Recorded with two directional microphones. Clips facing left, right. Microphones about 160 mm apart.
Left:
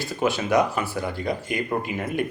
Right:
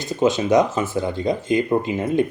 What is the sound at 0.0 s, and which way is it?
Speech, 20° right (ahead or behind).